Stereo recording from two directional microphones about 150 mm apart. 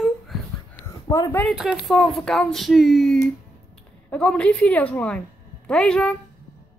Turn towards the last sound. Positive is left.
turn(degrees=5)  # may be behind; listen again after turning